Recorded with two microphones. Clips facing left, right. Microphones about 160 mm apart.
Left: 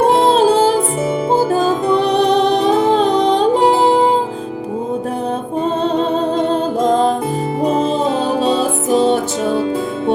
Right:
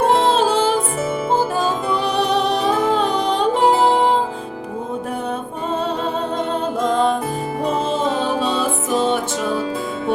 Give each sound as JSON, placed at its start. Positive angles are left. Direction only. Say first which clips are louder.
{"t": 0.2, "sound": "music", "louder": "left 5 dB", "side_deg": 35}
{"t": 6.5, "sound": "music", "louder": "left 5 dB", "side_deg": 35}